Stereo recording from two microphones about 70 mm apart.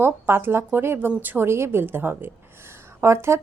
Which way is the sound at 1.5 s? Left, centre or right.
Right.